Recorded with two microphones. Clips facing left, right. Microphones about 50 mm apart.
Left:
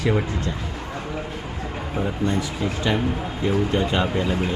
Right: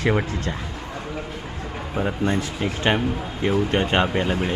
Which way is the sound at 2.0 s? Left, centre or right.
Right.